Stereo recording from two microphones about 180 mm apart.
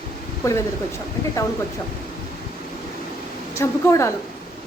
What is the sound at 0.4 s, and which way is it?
Speech, 20° left (ahead or behind).